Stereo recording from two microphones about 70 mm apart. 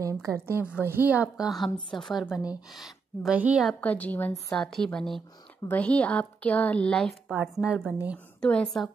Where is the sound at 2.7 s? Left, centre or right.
Centre.